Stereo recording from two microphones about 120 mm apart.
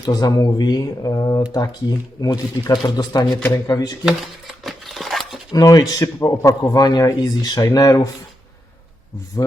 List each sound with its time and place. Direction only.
0.0 s speech: 30° left (ahead or behind)
4.0 s a sound: centre (ahead or behind)
5.6 s speech: 30° left (ahead or behind)